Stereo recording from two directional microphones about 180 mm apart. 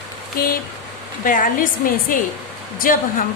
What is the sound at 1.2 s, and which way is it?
A woman's voice, 50° left (ahead or behind).